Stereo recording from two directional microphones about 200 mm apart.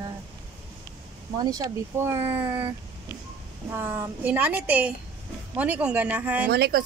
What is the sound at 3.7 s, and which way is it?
A woman's voice, 10° right (ahead or behind).